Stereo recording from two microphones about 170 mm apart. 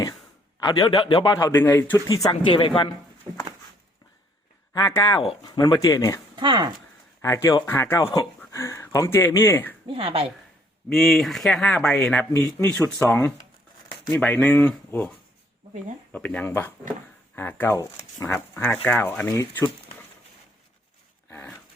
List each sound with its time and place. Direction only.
0.6 s a man's voice: 25° left (ahead or behind)
1.5 s speech: 10° left (ahead or behind)
2.3 s speech: 30° left (ahead or behind)
4.7 s a man's voice: 20° left (ahead or behind)
6.3 s speech: 25° right (ahead or behind)
7.2 s speech: 15° left (ahead or behind)
8.0 s a man's voice: 25° left (ahead or behind)
9.8 s a woman's voice: 30° right (ahead or behind)
10.8 s speech: centre (ahead or behind)
12.3 s speech: 20° left (ahead or behind)
16.1 s speech: 10° left (ahead or behind)
21.2 s dog: 15° left (ahead or behind)